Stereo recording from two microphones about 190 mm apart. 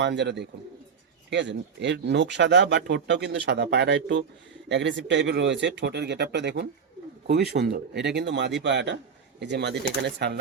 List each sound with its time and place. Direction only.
0.0 s speech: 70° right (ahead or behind)